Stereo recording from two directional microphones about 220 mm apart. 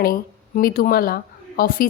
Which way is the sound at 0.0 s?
40° left (ahead or behind).